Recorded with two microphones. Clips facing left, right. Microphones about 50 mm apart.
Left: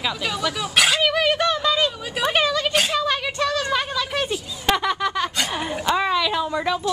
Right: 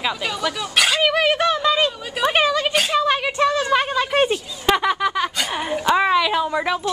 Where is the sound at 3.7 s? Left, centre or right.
Right.